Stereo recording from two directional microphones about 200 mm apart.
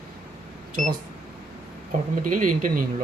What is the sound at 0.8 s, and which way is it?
Speech, 35° right (ahead or behind).